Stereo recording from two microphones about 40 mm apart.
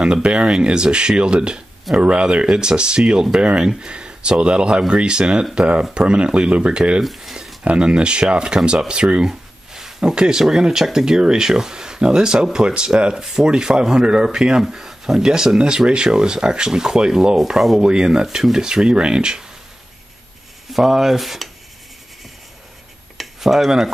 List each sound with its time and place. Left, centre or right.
0.0 s speech: right
7.0 s speech: centre
7.6 s speech: right
9.2 s a sound: centre
10.1 s speech: right
17.8 s speech: right
20.7 s speech: centre
23.1 s a sound: centre